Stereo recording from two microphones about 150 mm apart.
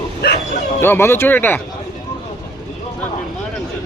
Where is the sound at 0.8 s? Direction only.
15° left (ahead or behind).